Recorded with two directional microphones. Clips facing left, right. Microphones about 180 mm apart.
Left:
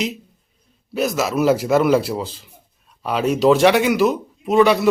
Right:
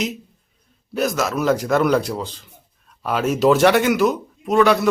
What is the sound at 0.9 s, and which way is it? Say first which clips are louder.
A man's voice: left 1 dB; centre (ahead or behind).